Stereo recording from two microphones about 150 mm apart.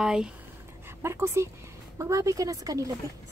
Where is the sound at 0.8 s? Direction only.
20° right (ahead or behind).